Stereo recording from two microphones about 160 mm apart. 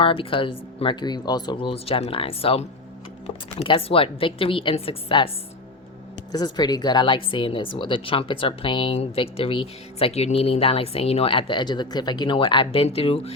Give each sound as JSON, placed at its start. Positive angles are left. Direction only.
{"t": 0.0, "sound": "speech", "side_deg": 35}
{"t": 1.7, "sound": "speech", "side_deg": 40}
{"t": 6.3, "sound": "speech", "side_deg": 25}